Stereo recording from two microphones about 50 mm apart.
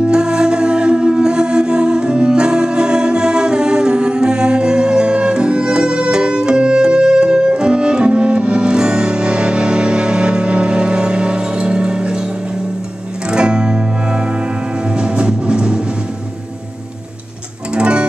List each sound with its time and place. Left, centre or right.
0.0 s music: centre
13.3 s music: centre
17.7 s music: right